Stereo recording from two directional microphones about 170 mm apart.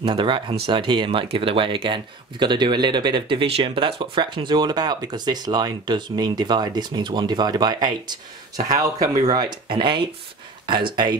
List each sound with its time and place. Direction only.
0.0 s speech: 30° right (ahead or behind)